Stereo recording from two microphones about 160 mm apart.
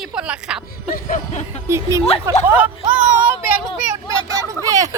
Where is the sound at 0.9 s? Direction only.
50° left (ahead or behind).